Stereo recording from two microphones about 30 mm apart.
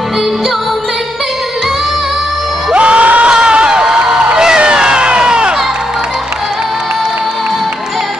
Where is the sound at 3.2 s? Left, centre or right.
Right.